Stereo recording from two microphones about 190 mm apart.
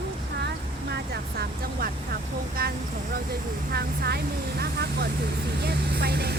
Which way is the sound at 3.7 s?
55° right (ahead or behind).